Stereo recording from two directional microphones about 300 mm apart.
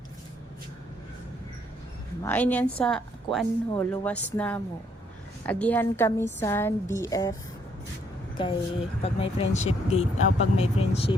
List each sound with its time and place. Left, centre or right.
2.2 s speech: centre
8.4 s speech: centre